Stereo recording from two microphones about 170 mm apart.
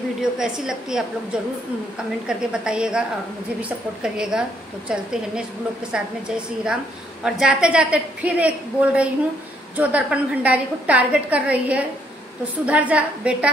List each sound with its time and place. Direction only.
0.2 s a woman's voice: 5° right (ahead or behind)